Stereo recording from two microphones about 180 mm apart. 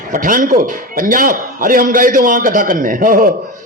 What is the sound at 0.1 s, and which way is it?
A man's voice, 50° right (ahead or behind).